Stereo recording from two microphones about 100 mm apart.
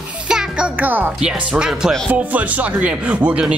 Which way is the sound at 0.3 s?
10° right (ahead or behind).